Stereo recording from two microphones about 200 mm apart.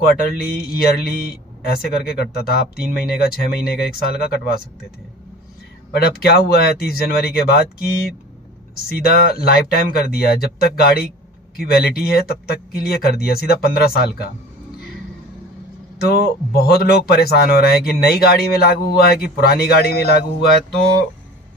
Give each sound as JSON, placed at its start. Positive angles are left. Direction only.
{"t": 0.0, "sound": "speech", "side_deg": 50}
{"t": 5.9, "sound": "speech", "side_deg": 50}
{"t": 16.0, "sound": "speech", "side_deg": 50}